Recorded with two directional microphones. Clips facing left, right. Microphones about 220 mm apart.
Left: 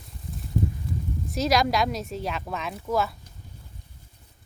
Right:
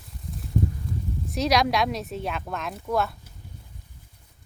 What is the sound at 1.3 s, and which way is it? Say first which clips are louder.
Speech: even; centre (ahead or behind).